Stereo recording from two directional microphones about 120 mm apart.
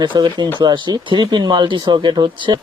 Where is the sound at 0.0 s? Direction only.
35° right (ahead or behind).